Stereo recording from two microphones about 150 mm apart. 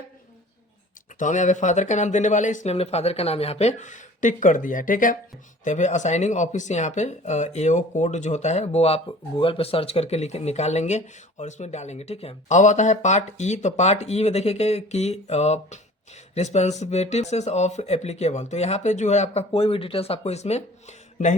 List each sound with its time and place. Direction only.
1.2 s speech: 55° left (ahead or behind)
5.6 s speech: 50° left (ahead or behind)